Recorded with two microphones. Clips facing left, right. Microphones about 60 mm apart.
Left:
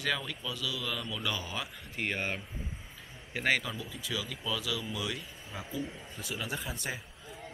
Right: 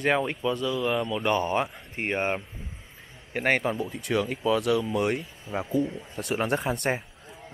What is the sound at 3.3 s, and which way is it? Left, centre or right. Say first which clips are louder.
A man's voice: right 6 dB; right.